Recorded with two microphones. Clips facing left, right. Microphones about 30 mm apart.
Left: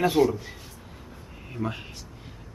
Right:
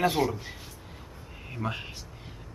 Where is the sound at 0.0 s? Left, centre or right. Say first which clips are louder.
Left 4 dB; centre.